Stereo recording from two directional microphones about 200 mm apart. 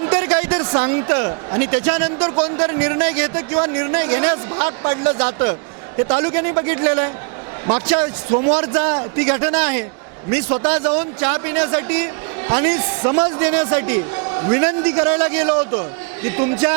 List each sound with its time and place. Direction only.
0.0 s a sound: 15° right (ahead or behind)
0.5 s a man's voice: 25° right (ahead or behind)
2.1 s a man's voice: 30° right (ahead or behind)
2.6 s a man's voice: 15° right (ahead or behind)
11.2 s a man's voice: 15° right (ahead or behind)